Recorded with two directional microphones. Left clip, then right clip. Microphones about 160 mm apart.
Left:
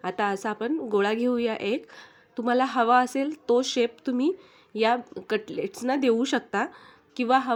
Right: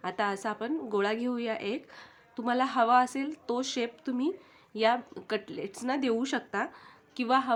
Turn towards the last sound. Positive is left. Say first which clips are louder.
# left 4 dB
turn(degrees=30)  # may be behind; listen again after turning